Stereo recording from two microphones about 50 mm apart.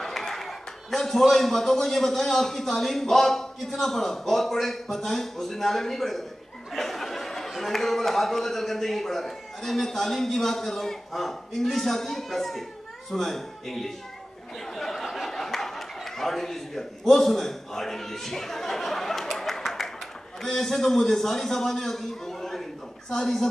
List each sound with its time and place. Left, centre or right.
0.0 s a man's voice: centre
14.7 s a sound: centre
20.4 s a man's voice: centre